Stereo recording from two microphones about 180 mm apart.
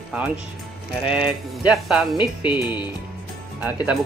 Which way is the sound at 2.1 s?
25° left (ahead or behind).